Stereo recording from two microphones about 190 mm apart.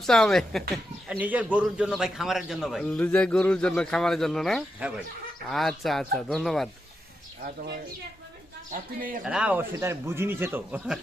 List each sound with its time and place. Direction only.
0.0 s speech: centre (ahead or behind)
8.7 s speech: 45° right (ahead or behind)
9.2 s a man's voice: 5° right (ahead or behind)